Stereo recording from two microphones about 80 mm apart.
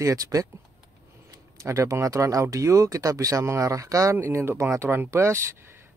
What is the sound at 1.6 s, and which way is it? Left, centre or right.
Speech, right.